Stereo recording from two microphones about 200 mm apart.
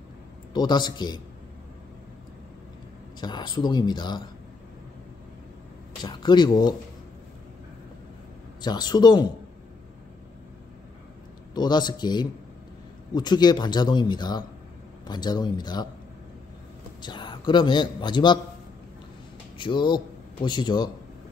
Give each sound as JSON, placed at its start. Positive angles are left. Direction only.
{"t": 0.5, "sound": "a man's voice", "side_deg": 20}
{"t": 3.2, "sound": "a man's voice", "side_deg": 20}
{"t": 6.0, "sound": "a man's voice", "side_deg": 20}
{"t": 8.5, "sound": "a man's voice", "side_deg": 20}
{"t": 11.5, "sound": "a man's voice", "side_deg": 20}
{"t": 17.0, "sound": "a man's voice", "side_deg": 20}
{"t": 19.6, "sound": "a man's voice", "side_deg": 25}